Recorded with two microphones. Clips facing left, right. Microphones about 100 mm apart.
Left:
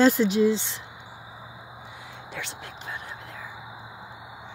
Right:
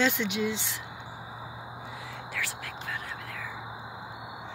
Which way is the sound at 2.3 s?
20° left (ahead or behind).